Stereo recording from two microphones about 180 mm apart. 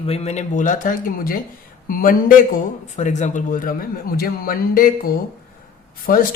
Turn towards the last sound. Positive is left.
turn(degrees=55)  # may be behind; listen again after turning